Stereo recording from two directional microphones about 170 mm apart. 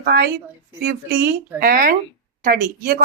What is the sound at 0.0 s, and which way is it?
Speech, 70° right (ahead or behind).